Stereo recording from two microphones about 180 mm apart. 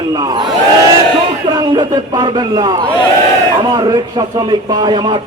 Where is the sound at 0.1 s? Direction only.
20° right (ahead or behind).